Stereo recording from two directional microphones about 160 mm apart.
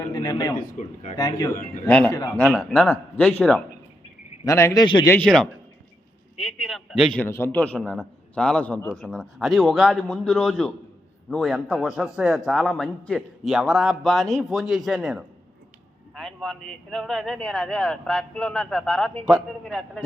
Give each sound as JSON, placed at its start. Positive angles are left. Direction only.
{"t": 0.1, "sound": "a sound", "side_deg": 25}
{"t": 0.6, "sound": "speech", "side_deg": 50}
{"t": 1.1, "sound": "a man's voice", "side_deg": 25}
{"t": 1.9, "sound": "a man's voice", "side_deg": 5}
{"t": 2.9, "sound": "a man's voice", "side_deg": 15}
{"t": 5.0, "sound": "a man's voice", "side_deg": 10}
{"t": 7.3, "sound": "a man's voice", "side_deg": 15}